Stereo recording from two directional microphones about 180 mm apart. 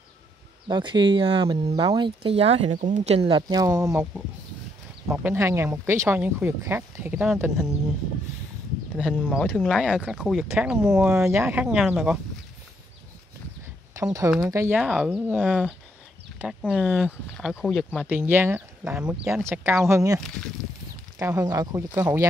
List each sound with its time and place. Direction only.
0.7 s speech: 25° right (ahead or behind)
5.0 s speech: 10° right (ahead or behind)
8.9 s speech: 5° left (ahead or behind)
14.5 s speech: 10° right (ahead or behind)
18.0 s speech: 10° right (ahead or behind)
21.2 s speech: 15° right (ahead or behind)